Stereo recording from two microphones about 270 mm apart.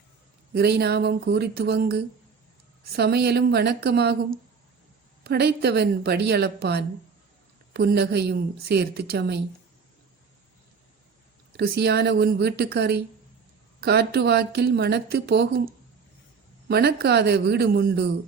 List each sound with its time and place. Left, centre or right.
0.5 s a woman's voice: right
11.5 s a woman's voice: right